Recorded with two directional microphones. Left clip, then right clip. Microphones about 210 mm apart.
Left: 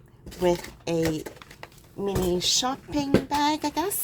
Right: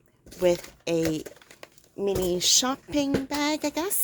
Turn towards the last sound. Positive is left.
turn(degrees=-35)  # may be behind; listen again after turning